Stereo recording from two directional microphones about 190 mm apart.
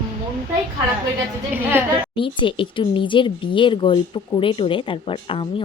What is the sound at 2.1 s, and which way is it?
Speech, 25° left (ahead or behind).